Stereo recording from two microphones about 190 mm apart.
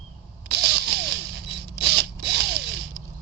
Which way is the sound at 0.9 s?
60° right (ahead or behind).